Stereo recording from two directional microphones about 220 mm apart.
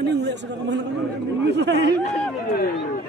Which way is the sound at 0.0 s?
50° right (ahead or behind).